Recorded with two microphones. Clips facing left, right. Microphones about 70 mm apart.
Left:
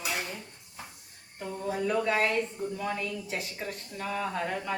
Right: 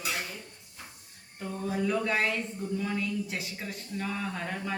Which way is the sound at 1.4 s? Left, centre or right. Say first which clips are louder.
Even; centre.